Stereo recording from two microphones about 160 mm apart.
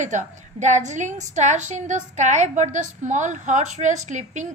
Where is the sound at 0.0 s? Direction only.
50° right (ahead or behind).